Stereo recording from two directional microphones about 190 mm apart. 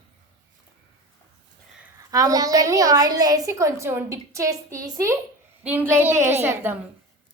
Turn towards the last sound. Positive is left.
turn(degrees=-10)  # may be behind; listen again after turning